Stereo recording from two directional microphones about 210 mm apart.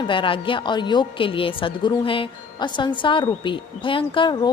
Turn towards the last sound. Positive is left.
turn(degrees=20)  # may be behind; listen again after turning